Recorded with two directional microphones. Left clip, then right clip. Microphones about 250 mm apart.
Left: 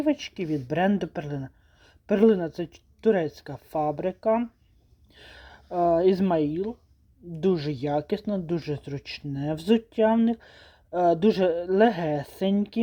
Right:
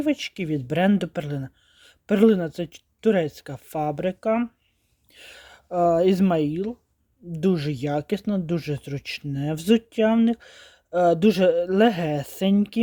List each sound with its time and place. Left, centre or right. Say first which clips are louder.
0.0 s speech: right 1 dB; right